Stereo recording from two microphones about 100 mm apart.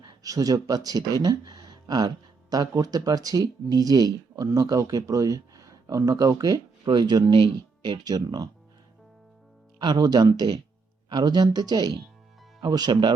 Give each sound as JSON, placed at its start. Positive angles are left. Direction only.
{"t": 0.2, "sound": "speech", "side_deg": -35}
{"t": 9.7, "sound": "speech", "side_deg": -45}